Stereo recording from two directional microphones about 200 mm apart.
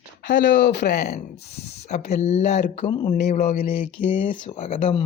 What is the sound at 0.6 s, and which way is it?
Speech, 60° left (ahead or behind).